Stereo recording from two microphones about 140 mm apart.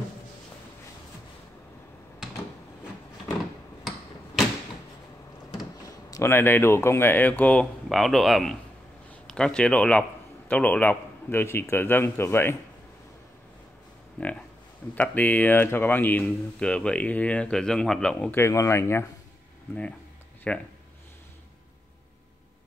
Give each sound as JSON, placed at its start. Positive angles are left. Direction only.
{"t": 6.0, "sound": "speech", "side_deg": 20}
{"t": 14.2, "sound": "speech", "side_deg": 10}
{"t": 18.4, "sound": "speech", "side_deg": 20}
{"t": 20.5, "sound": "speech", "side_deg": 10}